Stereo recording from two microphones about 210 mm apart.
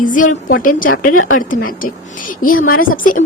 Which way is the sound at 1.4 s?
40° left (ahead or behind).